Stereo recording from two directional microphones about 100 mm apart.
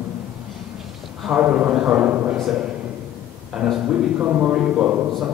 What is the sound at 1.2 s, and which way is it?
A man's voice, 10° right (ahead or behind).